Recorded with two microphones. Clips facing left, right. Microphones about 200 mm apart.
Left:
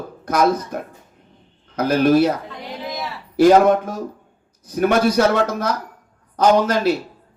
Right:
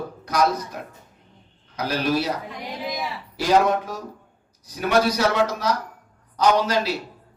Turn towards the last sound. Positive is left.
turn(degrees=50)  # may be behind; listen again after turning